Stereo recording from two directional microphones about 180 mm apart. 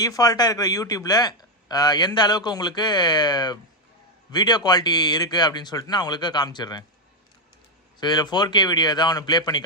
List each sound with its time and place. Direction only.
0.0 s speech: 20° left (ahead or behind)
7.9 s speech: 25° left (ahead or behind)